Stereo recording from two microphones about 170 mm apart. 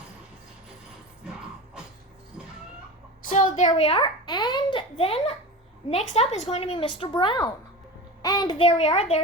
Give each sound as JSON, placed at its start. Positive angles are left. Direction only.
{"t": 3.2, "sound": "a woman's voice", "side_deg": 50}
{"t": 3.8, "sound": "a woman's voice", "side_deg": 35}
{"t": 8.6, "sound": "a woman's voice", "side_deg": 40}